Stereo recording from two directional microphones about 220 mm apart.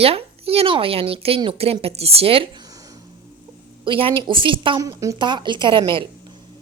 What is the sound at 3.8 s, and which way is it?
A woman's voice, 25° right (ahead or behind).